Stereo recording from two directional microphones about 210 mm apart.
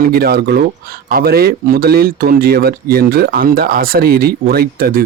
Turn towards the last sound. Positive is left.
turn(degrees=-45)  # may be behind; listen again after turning